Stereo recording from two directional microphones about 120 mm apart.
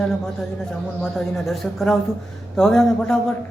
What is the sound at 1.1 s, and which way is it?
Speech, centre (ahead or behind).